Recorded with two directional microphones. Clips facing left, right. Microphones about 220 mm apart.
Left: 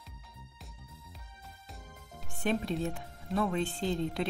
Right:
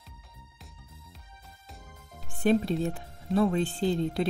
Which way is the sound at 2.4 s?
35° right (ahead or behind).